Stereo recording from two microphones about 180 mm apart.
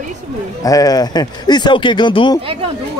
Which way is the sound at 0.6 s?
20° left (ahead or behind).